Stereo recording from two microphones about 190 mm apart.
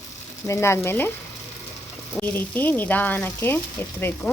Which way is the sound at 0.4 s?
15° left (ahead or behind).